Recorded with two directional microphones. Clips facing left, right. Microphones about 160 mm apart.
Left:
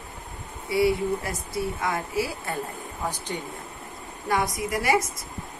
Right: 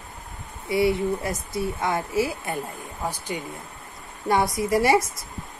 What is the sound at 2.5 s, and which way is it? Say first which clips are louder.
Speech: right 1 dB; 15° right (ahead or behind).